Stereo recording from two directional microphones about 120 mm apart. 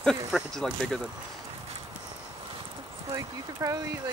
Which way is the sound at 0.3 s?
Centre (ahead or behind).